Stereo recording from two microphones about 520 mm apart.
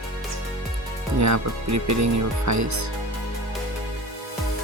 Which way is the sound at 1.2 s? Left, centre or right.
Right.